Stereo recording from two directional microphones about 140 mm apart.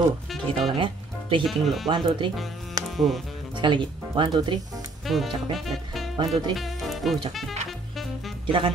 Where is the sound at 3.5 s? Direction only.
35° right (ahead or behind).